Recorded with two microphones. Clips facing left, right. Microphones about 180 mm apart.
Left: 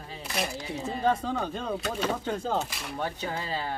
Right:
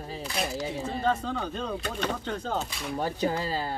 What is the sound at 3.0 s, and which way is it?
Speech, 40° right (ahead or behind).